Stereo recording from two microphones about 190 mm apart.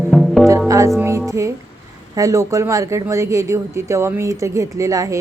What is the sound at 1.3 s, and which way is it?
A woman's voice, 15° right (ahead or behind).